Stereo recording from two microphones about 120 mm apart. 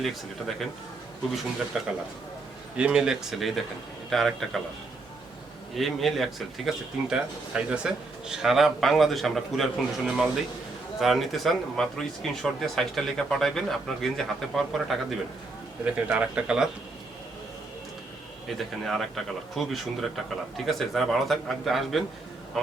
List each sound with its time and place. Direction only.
0.0 s speech: centre (ahead or behind)
1.7 s speech: 5° right (ahead or behind)
5.7 s speech: centre (ahead or behind)
15.8 s speech: 10° right (ahead or behind)
18.4 s speech: centre (ahead or behind)